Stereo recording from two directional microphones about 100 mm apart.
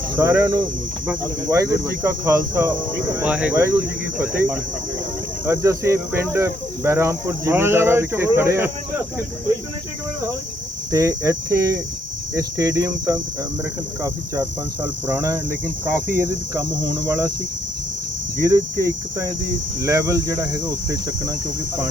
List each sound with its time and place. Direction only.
0.2 s speech: 30° right (ahead or behind)
3.2 s speech: 15° right (ahead or behind)
5.5 s speech: 25° right (ahead or behind)
10.9 s speech: 35° right (ahead or behind)
18.4 s speech: 30° right (ahead or behind)